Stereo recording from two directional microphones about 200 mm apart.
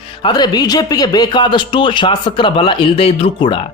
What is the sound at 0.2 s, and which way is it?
A man's voice, 20° left (ahead or behind).